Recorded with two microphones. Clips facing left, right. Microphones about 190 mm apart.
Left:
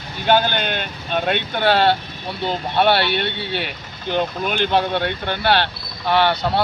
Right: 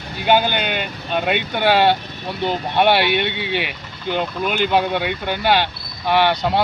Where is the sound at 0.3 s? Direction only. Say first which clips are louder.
Even; 10° right (ahead or behind).